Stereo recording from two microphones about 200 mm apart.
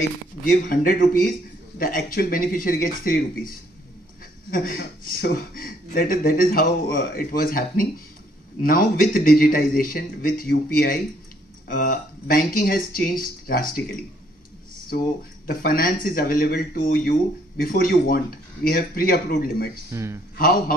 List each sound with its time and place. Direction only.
0.5 s speech: 45° left (ahead or behind)
15.4 s speech: 45° left (ahead or behind)
19.9 s speech: 15° right (ahead or behind)
20.3 s speech: 45° left (ahead or behind)